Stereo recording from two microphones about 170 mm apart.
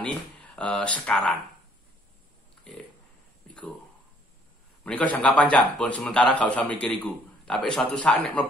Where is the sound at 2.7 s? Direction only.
5° left (ahead or behind).